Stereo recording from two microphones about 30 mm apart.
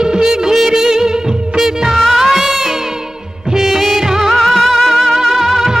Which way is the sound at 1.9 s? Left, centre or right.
Centre.